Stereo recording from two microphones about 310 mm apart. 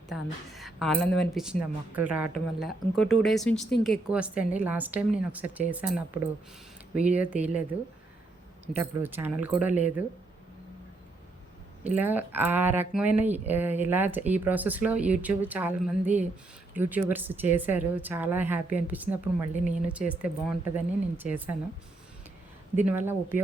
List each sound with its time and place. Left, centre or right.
0.1 s speech: centre
6.9 s speech: centre
8.6 s speech: centre
11.9 s speech: centre
22.8 s speech: centre